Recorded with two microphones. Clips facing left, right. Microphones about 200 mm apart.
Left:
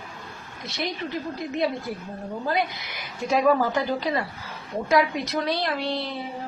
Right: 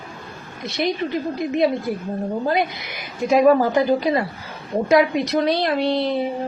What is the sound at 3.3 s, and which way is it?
A woman's voice, 15° right (ahead or behind).